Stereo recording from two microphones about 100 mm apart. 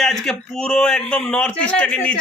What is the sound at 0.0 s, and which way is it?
A man's voice, 5° left (ahead or behind).